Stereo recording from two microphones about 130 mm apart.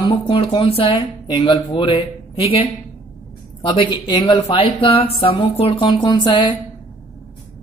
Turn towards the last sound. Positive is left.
turn(degrees=35)  # may be behind; listen again after turning